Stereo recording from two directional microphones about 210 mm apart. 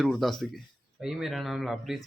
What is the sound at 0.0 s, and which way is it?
Speech, centre (ahead or behind).